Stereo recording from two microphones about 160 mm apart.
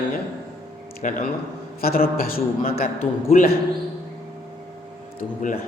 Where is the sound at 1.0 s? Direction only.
50° left (ahead or behind).